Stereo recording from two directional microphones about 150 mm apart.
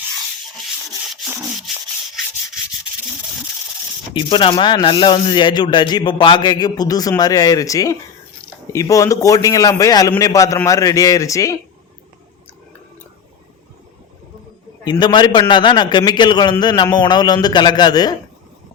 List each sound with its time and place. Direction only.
1.1 s rub: centre (ahead or behind)
4.1 s a man's voice: 30° left (ahead or behind)
14.8 s a man's voice: 30° left (ahead or behind)